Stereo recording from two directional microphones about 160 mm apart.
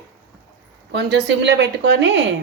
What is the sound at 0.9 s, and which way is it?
A woman's voice, 90° right.